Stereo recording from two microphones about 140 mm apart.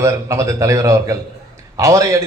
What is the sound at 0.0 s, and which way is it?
A man's voice, 20° right (ahead or behind).